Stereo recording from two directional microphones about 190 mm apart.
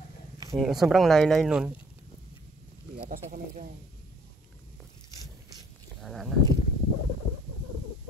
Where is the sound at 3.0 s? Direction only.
45° right (ahead or behind).